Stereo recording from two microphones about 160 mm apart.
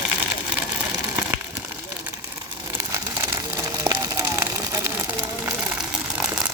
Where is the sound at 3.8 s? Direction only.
20° right (ahead or behind).